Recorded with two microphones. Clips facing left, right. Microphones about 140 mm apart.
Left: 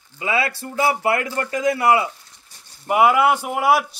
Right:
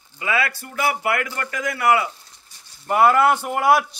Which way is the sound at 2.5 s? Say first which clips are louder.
Left 1 dB; 55° left (ahead or behind).